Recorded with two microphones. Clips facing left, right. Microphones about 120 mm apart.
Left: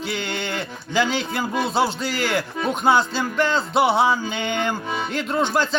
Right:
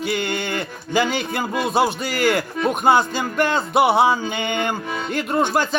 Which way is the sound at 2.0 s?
55° right (ahead or behind).